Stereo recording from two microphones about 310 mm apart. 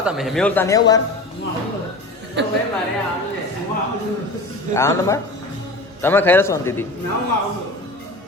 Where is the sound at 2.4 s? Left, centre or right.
Right.